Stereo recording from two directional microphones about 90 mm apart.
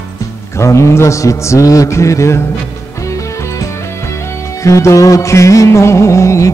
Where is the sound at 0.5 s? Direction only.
35° left (ahead or behind).